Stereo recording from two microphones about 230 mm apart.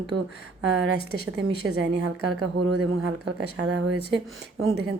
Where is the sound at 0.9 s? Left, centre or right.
Left.